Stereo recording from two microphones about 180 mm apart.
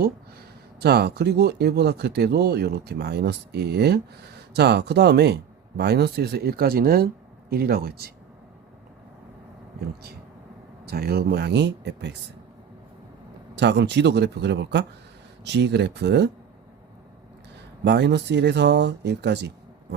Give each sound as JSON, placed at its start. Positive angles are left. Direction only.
{"t": 0.8, "sound": "speech", "side_deg": -65}
{"t": 10.8, "sound": "speech", "side_deg": -60}
{"t": 13.6, "sound": "speech", "side_deg": -75}
{"t": 17.8, "sound": "speech", "side_deg": -70}